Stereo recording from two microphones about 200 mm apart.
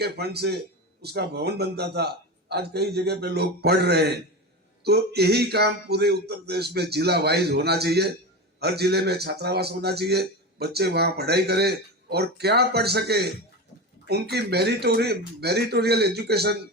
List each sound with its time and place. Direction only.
0.0 s a man's voice: 55° right (ahead or behind)